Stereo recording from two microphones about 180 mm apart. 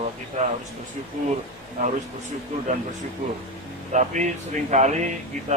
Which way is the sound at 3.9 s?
40° right (ahead or behind).